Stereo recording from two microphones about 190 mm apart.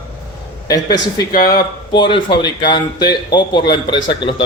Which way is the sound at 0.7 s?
20° left (ahead or behind).